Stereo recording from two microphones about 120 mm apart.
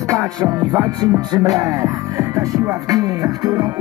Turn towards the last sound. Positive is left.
turn(degrees=-30)  # may be behind; listen again after turning